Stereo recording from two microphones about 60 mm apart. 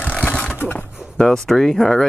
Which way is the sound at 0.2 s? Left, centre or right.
Left.